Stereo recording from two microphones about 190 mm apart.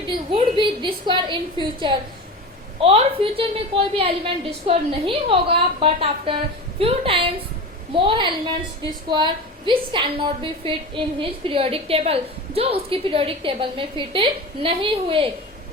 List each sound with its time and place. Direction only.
0.0 s a woman's voice: 25° right (ahead or behind)